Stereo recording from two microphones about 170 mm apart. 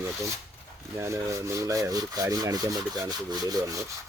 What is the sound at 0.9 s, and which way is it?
Rub, 15° right (ahead or behind).